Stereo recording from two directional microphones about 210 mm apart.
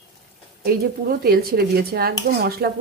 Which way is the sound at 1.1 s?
45° right (ahead or behind).